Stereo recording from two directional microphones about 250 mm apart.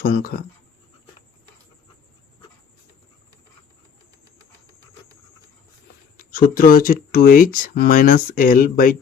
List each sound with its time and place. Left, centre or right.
0.0 s speech: left
6.1 s speech: left